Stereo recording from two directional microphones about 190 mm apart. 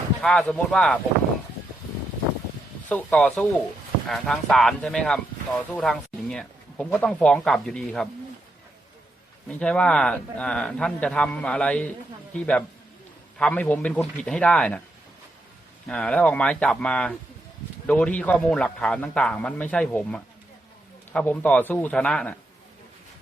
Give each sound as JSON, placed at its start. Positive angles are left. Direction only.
{"t": 0.2, "sound": "speech", "side_deg": 5}
{"t": 2.9, "sound": "a man's voice", "side_deg": 5}
{"t": 9.5, "sound": "a man's voice", "side_deg": 5}
{"t": 15.9, "sound": "a man's voice", "side_deg": 5}